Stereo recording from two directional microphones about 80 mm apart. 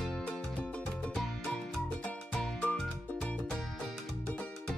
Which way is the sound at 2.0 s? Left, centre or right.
Centre.